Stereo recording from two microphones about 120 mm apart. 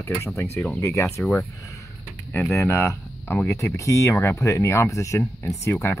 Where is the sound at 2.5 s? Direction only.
20° left (ahead or behind).